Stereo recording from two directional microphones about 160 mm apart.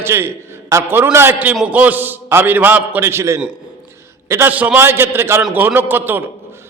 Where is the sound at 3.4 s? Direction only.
5° right (ahead or behind).